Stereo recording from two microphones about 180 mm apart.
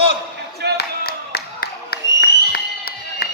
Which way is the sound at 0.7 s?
60° left (ahead or behind).